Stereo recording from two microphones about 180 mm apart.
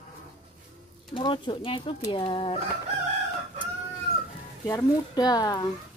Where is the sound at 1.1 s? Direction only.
25° left (ahead or behind).